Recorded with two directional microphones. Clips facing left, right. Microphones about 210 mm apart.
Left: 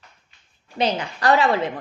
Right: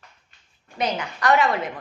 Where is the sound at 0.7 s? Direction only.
30° left (ahead or behind).